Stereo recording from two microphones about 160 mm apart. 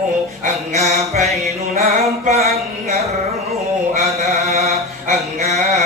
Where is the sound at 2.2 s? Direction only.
45° right (ahead or behind).